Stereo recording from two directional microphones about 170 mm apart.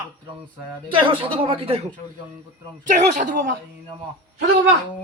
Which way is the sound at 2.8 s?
45° right (ahead or behind).